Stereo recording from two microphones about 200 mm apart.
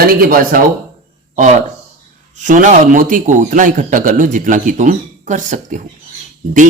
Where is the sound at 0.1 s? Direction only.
45° right (ahead or behind).